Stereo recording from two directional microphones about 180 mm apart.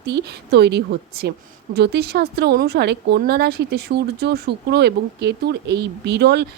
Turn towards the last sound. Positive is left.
turn(degrees=-65)  # may be behind; listen again after turning